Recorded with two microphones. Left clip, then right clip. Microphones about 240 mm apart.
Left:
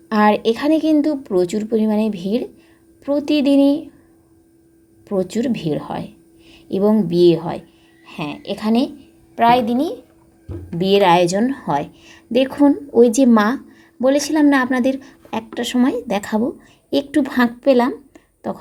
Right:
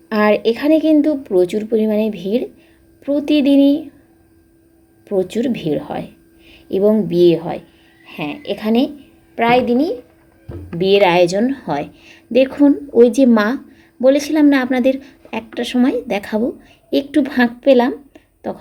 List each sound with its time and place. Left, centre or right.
0.1 s a woman's voice: left
5.0 s a woman's voice: left